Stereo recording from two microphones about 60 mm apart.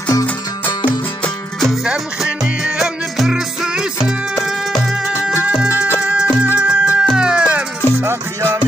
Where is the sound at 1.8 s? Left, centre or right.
Centre.